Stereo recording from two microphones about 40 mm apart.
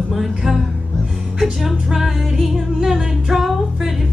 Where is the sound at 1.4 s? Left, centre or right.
Centre.